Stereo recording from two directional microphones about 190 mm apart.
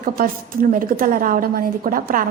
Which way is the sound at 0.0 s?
50° right (ahead or behind).